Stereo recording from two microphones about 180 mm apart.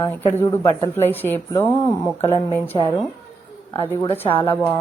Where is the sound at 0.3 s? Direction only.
15° left (ahead or behind).